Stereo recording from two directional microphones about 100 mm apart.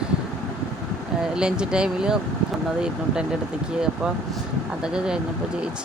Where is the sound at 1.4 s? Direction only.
10° right (ahead or behind).